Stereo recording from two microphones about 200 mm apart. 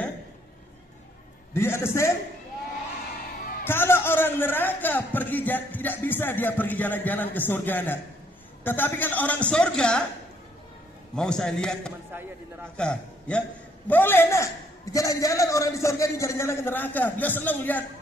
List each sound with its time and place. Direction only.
1.5 s a man's voice: 10° left (ahead or behind)
3.6 s a man's voice: 10° left (ahead or behind)
11.1 s a man's voice: 5° left (ahead or behind)